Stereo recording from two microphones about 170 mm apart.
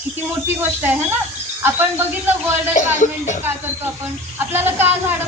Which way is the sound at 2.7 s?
50° left (ahead or behind).